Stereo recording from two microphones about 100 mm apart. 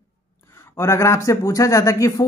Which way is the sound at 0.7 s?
30° left (ahead or behind).